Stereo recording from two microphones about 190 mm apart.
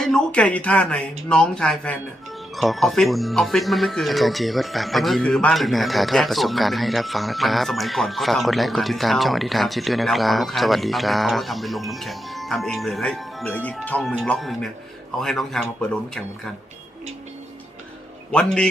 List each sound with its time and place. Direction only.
0.0 s speech: 5° left (ahead or behind)
18.3 s speech: 5° left (ahead or behind)